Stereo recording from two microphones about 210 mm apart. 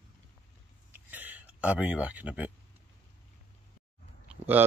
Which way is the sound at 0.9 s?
10° right (ahead or behind).